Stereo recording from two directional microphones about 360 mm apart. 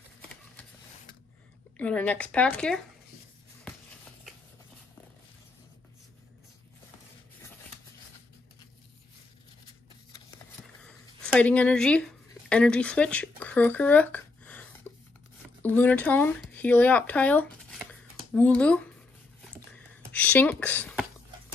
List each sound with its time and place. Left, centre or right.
1.8 s speech: centre
11.3 s speech: centre
20.1 s speech: centre